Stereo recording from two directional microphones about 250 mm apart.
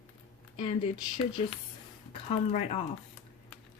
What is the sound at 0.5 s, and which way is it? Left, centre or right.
Speech, left.